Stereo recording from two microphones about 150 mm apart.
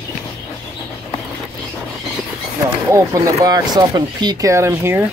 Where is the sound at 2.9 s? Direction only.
20° right (ahead or behind).